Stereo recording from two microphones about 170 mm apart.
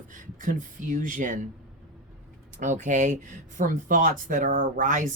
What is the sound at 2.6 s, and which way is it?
Speech, 45° right (ahead or behind).